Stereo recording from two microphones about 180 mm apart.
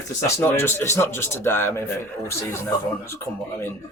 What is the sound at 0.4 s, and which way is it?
Speech, 15° left (ahead or behind).